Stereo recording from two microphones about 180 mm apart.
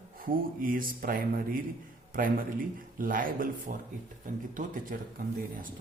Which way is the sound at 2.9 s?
50° right (ahead or behind).